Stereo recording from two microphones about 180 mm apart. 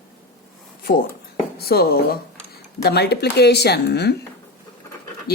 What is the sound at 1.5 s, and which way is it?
A woman's voice, 60° left (ahead or behind).